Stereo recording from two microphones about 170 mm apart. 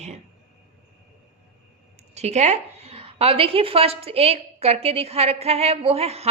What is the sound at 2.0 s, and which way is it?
A woman's voice, 40° right (ahead or behind).